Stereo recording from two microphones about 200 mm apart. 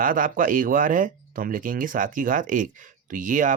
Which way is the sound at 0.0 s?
45° right (ahead or behind).